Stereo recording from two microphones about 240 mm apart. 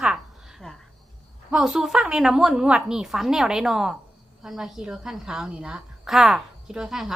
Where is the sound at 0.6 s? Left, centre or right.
Centre.